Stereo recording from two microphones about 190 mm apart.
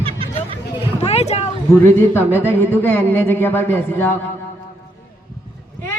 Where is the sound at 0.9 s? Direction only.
35° left (ahead or behind).